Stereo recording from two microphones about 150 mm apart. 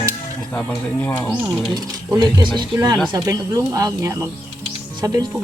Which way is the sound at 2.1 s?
30° right (ahead or behind).